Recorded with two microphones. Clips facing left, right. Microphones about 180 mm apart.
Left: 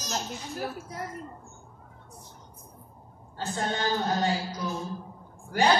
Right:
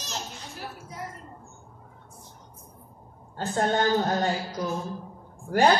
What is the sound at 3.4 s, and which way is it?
Speech, 50° right (ahead or behind).